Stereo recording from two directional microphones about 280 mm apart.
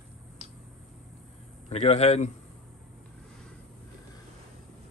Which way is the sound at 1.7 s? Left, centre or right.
Left.